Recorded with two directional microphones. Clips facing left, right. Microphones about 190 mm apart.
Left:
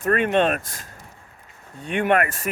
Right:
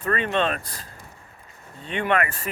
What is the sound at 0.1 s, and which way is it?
Speech, 55° left (ahead or behind).